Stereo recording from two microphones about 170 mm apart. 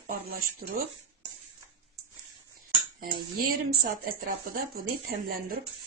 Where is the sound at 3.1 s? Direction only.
60° right (ahead or behind).